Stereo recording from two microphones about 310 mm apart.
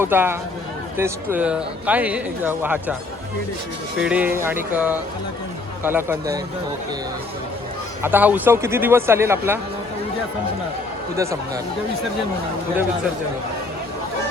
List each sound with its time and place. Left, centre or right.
0.0 s speech: centre
4.0 s speech: centre
8.0 s speech: centre
11.2 s speech: centre